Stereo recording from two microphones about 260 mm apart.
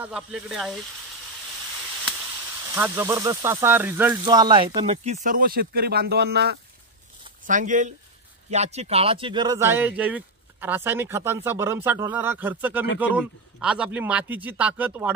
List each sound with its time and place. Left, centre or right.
0.0 s a man's voice: centre
2.7 s a man's voice: centre